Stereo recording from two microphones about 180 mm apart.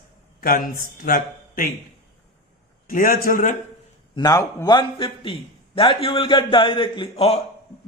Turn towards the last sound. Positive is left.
turn(degrees=35)  # may be behind; listen again after turning